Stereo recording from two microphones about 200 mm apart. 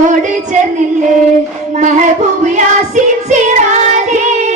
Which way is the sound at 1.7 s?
35° right (ahead or behind).